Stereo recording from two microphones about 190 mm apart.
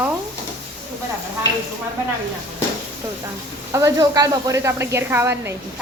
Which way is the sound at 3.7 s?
20° right (ahead or behind).